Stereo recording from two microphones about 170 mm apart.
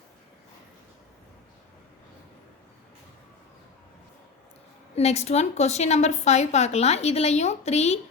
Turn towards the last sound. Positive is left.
turn(degrees=40)  # may be behind; listen again after turning